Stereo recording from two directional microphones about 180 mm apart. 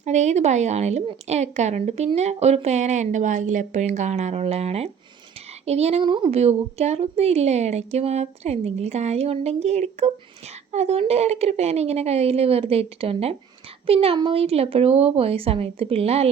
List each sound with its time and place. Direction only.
0.0 s a woman's voice: 40° right (ahead or behind)